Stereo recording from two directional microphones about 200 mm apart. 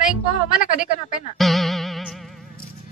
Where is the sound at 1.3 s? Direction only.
Centre (ahead or behind).